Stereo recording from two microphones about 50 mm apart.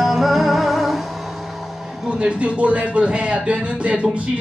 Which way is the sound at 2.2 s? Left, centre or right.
Right.